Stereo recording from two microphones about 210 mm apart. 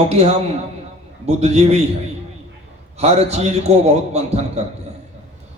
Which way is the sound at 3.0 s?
30° right (ahead or behind).